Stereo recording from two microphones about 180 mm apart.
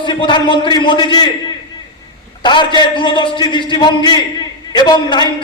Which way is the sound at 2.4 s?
25° left (ahead or behind).